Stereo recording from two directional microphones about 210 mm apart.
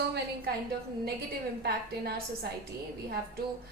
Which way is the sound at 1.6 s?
50° right (ahead or behind).